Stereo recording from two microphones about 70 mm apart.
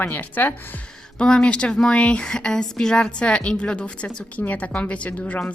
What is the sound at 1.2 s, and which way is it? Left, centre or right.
A woman's voice, centre.